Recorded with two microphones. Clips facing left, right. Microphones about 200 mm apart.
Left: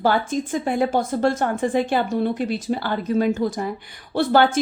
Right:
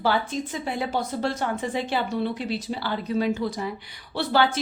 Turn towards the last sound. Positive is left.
turn(degrees=50)  # may be behind; listen again after turning